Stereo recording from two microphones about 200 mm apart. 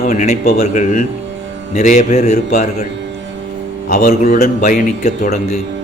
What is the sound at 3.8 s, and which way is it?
A man's voice, 40° left (ahead or behind).